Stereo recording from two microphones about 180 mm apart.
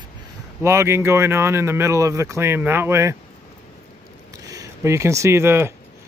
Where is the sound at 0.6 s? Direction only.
15° right (ahead or behind).